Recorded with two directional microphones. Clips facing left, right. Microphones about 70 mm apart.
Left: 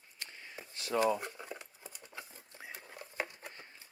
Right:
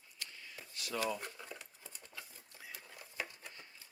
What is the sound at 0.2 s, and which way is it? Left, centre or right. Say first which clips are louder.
Shuffling cards: left 3 dB; left.